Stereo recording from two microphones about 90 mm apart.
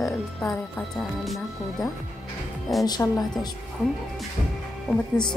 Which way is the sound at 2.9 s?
45° left (ahead or behind).